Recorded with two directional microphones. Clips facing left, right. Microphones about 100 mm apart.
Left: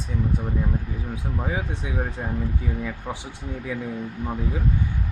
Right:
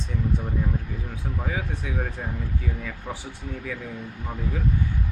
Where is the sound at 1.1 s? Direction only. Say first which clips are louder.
Left 3 dB; 20° left (ahead or behind).